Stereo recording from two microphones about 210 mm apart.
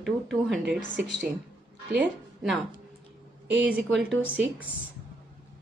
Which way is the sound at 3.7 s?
5° right (ahead or behind).